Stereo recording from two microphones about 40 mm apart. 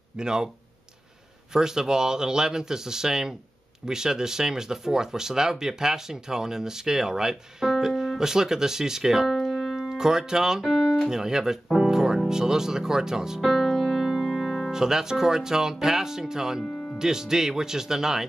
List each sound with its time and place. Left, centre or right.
0.2 s speech: centre
1.5 s speech: centre
9.8 s speech: centre
10.6 s speech: centre
11.1 s speech: centre
13.4 s music: centre
14.7 s speech: centre
16.6 s music: left
17.0 s speech: centre